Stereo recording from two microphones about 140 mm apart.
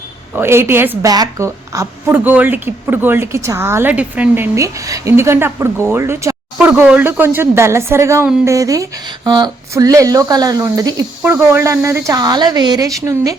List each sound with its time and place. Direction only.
0.3 s speech: 15° right (ahead or behind)
4.5 s speech: 25° right (ahead or behind)